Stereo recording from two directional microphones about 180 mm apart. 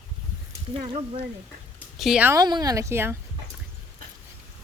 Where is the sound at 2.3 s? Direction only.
20° right (ahead or behind).